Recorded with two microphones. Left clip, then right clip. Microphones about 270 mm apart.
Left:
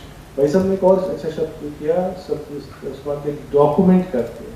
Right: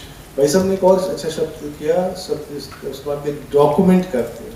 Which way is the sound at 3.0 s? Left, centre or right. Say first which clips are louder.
Right 1 dB; left.